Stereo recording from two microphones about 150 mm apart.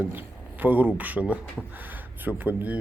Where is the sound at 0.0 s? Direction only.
15° right (ahead or behind).